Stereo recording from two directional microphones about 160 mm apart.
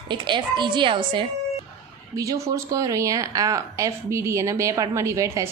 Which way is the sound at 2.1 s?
20° right (ahead or behind).